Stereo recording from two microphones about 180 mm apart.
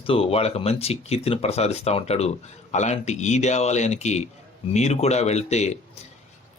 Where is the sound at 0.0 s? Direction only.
30° left (ahead or behind).